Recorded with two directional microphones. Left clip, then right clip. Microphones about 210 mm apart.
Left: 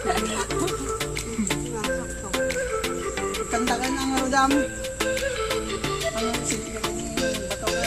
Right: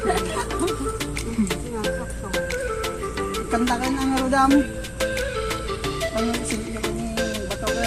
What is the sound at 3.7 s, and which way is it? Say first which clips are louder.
Music: right 2 dB; centre (ahead or behind).